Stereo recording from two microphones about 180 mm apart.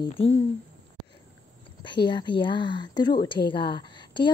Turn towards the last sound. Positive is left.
turn(degrees=25)  # may be behind; listen again after turning